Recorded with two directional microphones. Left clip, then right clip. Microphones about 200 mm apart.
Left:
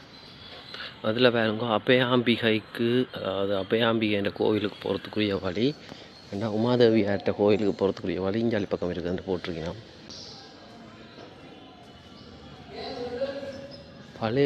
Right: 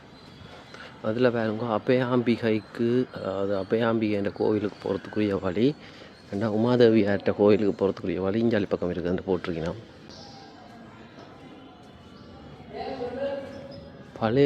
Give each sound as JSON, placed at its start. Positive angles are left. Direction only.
{"t": 0.7, "sound": "speech", "side_deg": 0}
{"t": 14.2, "sound": "speech", "side_deg": -15}